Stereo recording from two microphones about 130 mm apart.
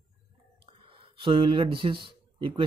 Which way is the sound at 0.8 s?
45° right (ahead or behind).